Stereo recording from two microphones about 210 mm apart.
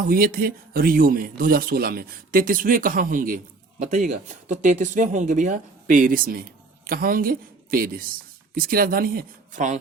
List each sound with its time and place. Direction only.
0.1 s a woman's voice: 45° right (ahead or behind)